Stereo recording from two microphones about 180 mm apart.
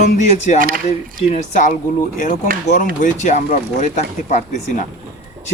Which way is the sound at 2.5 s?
50° right (ahead or behind).